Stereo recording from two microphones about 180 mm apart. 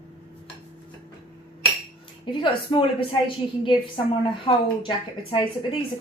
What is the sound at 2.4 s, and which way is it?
Speech, 25° left (ahead or behind).